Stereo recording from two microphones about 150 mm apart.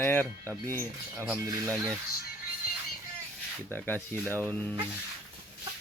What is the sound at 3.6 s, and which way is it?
Speech, 15° left (ahead or behind).